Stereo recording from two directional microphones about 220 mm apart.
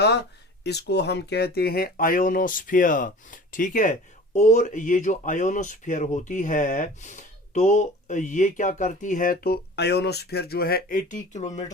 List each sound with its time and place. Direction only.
0.0 s speech: 50° left (ahead or behind); by 11.6 s 30° left (ahead or behind)